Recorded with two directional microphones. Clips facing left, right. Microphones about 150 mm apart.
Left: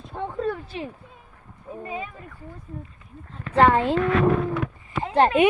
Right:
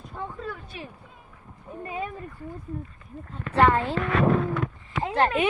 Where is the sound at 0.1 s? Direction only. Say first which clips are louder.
Left 8 dB; 70° left (ahead or behind).